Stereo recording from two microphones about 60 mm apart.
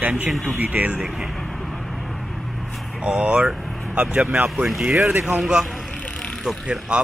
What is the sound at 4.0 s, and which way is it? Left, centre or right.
Speech, right.